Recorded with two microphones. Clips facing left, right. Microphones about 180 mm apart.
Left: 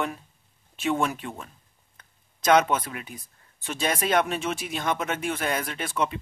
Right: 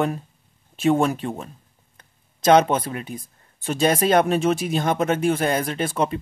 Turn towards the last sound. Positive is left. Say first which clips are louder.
# right 6 dB
turn(degrees=-35)  # may be behind; listen again after turning